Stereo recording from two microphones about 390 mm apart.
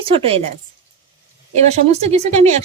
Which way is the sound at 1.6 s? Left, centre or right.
Centre.